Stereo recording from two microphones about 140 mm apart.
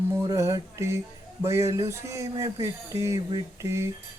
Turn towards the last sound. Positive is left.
turn(degrees=-20)  # may be behind; listen again after turning